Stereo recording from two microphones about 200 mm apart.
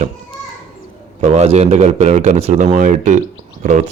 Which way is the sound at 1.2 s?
30° right (ahead or behind).